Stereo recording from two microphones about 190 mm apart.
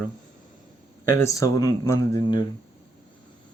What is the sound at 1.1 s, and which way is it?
Speech, 15° left (ahead or behind).